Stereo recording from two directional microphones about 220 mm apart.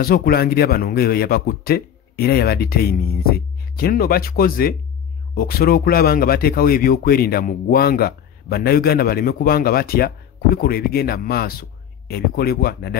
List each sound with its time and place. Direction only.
0.0 s speech: 45° left (ahead or behind)